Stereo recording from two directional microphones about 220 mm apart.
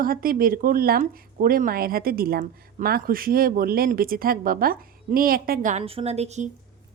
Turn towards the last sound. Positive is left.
turn(degrees=-30)  # may be behind; listen again after turning